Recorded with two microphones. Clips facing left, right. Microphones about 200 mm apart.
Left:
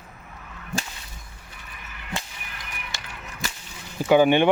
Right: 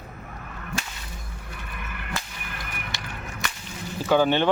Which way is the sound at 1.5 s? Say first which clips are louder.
Right 6 dB; 60° right (ahead or behind).